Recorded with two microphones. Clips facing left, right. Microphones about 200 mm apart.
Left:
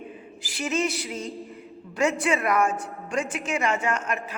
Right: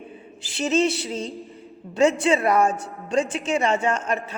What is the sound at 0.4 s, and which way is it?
Speech, 25° right (ahead or behind).